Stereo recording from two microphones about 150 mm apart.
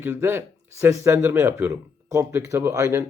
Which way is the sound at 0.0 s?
15° right (ahead or behind).